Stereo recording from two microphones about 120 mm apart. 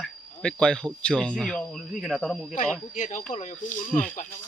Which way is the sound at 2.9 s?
90° left.